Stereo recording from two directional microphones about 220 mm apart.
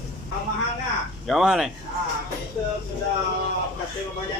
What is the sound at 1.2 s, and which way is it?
Speech, centre (ahead or behind).